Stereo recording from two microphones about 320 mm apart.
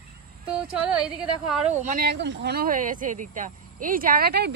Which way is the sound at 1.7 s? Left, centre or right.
Right.